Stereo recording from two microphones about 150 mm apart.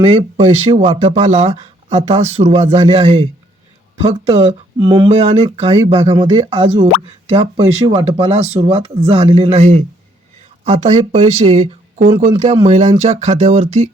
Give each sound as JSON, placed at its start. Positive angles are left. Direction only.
{"t": 0.0, "sound": "speech", "side_deg": -40}
{"t": 4.8, "sound": "speech", "side_deg": -30}
{"t": 5.1, "sound": "speech", "side_deg": -45}
{"t": 6.1, "sound": "speech", "side_deg": -25}